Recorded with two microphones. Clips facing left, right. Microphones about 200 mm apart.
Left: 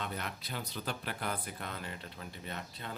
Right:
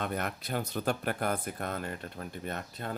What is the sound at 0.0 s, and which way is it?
Speech, 50° right (ahead or behind).